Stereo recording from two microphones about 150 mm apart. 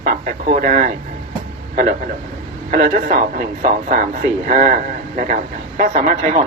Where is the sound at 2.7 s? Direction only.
75° right (ahead or behind); by 6.4 s 55° right (ahead or behind).